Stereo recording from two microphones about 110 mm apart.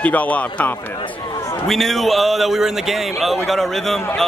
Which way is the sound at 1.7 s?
Centre (ahead or behind).